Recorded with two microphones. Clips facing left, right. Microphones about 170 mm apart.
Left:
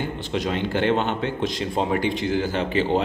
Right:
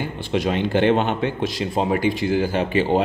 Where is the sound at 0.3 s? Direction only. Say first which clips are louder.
Right 5 dB; 15° right (ahead or behind).